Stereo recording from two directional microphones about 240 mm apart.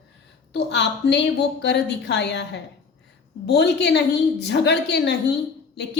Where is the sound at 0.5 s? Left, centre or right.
Left.